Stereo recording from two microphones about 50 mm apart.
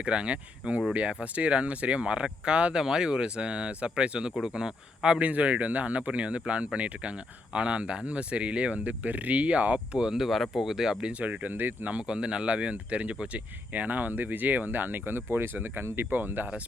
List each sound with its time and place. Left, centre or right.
0.0 s a man's voice: right
5.2 s speech: right
10.2 s speech: centre
11.0 s speech: right
11.9 s speech: centre; by 16.5 s right